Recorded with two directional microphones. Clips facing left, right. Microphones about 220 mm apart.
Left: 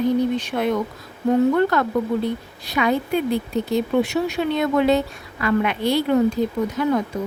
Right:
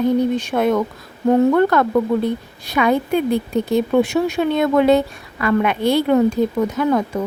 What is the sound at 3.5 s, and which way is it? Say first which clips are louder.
Speech: right 4 dB; 50° right (ahead or behind).